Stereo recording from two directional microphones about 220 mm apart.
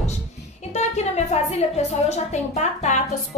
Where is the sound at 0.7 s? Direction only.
30° left (ahead or behind).